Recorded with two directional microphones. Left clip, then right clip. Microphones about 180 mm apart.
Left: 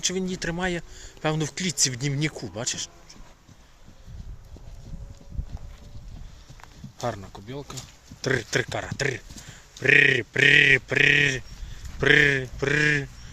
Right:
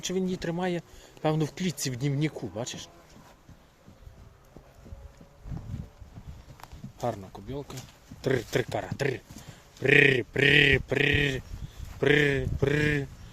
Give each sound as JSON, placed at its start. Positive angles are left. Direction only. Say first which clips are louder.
{"t": 0.0, "sound": "speech", "louder": "left 3 dB", "side_deg": -5}
{"t": 5.7, "sound": "wind noise", "louder": "right 5 dB", "side_deg": 30}
{"t": 7.0, "sound": "speech", "louder": "left 1 dB", "side_deg": -5}